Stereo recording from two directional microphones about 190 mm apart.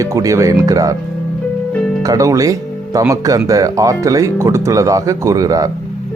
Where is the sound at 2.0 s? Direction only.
15° right (ahead or behind).